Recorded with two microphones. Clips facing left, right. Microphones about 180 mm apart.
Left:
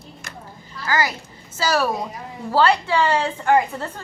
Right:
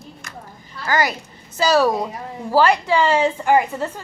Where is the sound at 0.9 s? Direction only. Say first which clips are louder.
Right 2 dB; 20° right (ahead or behind).